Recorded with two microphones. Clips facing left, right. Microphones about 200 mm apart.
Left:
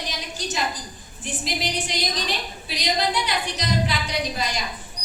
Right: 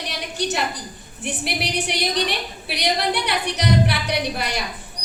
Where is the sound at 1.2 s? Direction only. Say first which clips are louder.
Right 2 dB; 65° right (ahead or behind).